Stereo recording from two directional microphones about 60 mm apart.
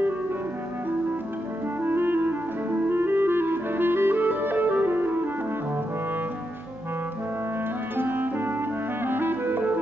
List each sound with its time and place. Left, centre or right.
1.8 s clarinet: right
8.0 s music: right
9.0 s clarinet: right